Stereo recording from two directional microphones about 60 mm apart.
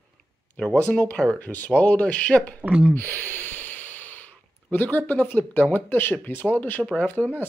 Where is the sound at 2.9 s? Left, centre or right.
Left.